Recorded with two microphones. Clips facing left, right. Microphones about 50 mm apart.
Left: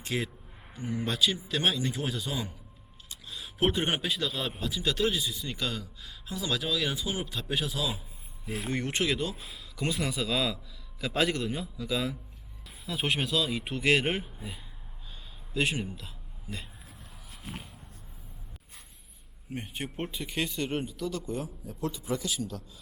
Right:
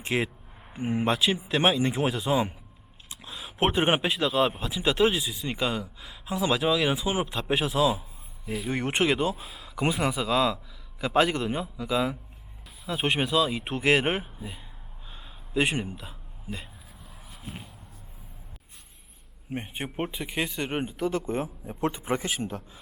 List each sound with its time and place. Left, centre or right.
0.0 s a man's voice: right
3.6 s a man's voice: right; by 13.7 s centre
13.7 s a man's voice: right
13.9 s a man's voice: centre
15.1 s a sound: right
19.5 s a man's voice: right
20.8 s a man's voice: right